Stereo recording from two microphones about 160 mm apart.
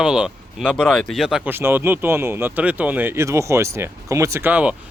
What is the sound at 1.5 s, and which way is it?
Speech, 15° right (ahead or behind).